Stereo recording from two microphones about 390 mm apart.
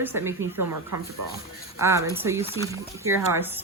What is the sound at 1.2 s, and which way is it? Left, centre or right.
Speech, right.